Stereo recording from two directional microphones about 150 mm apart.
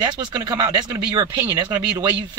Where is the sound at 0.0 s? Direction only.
25° right (ahead or behind).